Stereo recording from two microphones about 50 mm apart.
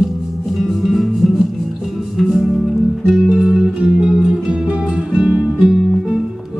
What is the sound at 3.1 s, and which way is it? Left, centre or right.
Music, centre.